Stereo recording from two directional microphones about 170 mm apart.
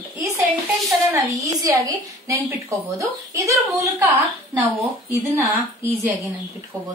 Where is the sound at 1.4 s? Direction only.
20° right (ahead or behind).